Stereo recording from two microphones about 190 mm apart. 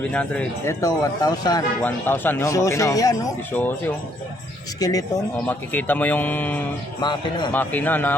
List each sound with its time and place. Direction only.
0.0 s speech: 5° left (ahead or behind)
1.8 s a man's voice: 10° left (ahead or behind)
7.0 s a man's voice: 25° left (ahead or behind)
7.5 s speech: 10° left (ahead or behind)